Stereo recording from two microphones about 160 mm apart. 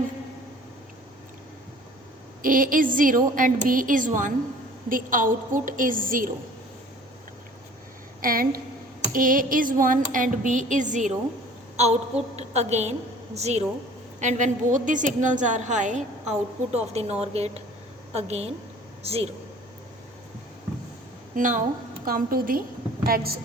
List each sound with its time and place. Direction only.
2.4 s speech: 60° right (ahead or behind)
8.2 s a woman's voice: 60° right (ahead or behind); by 19.3 s 40° right (ahead or behind)
21.3 s a woman's voice: 55° right (ahead or behind); by 23.4 s 70° right (ahead or behind)